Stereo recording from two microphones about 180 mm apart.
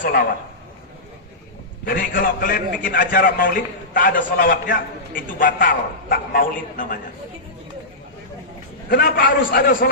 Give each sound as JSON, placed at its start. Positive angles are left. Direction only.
{"t": 0.0, "sound": "a sound", "side_deg": 50}
{"t": 1.8, "sound": "a man's voice", "side_deg": 55}
{"t": 8.9, "sound": "a man's voice", "side_deg": 65}